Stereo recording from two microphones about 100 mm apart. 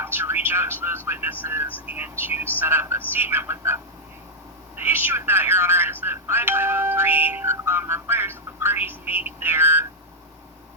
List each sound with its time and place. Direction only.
0.0 s speech: 20° right (ahead or behind)
4.8 s speech: 25° right (ahead or behind)